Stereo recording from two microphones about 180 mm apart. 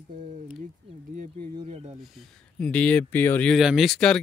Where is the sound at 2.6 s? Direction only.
5° left (ahead or behind).